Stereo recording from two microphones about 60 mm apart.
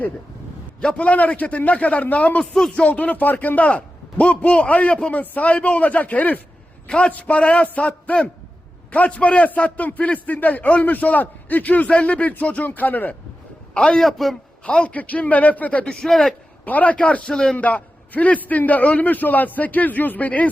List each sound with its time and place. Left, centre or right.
0.8 s a man's voice: centre
2.4 s speech: centre
2.8 s a man's voice: left
6.8 s a man's voice: centre
13.7 s a man's voice: centre
14.6 s a man's voice: centre
15.9 s speech: centre
16.6 s a man's voice: left; by 17.6 s centre
17.6 s a man's voice: left